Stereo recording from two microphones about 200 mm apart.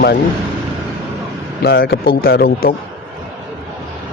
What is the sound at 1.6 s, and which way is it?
Speech, 50° left (ahead or behind).